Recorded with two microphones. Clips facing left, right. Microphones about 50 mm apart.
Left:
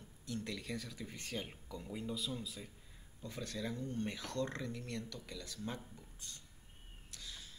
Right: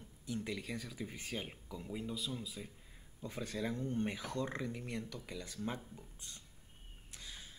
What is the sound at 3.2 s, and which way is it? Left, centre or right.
Speech, centre.